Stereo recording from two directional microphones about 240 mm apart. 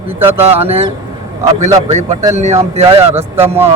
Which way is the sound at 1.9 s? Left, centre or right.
Right.